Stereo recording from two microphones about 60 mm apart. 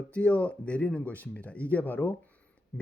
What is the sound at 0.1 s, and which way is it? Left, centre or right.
Speech, left.